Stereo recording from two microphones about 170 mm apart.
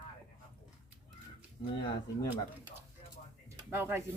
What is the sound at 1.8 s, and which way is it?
Speech, 25° left (ahead or behind).